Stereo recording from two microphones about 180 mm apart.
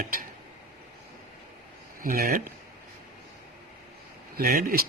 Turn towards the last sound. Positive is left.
turn(degrees=-55)  # may be behind; listen again after turning